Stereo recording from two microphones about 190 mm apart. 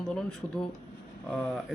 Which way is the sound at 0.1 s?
5° left (ahead or behind).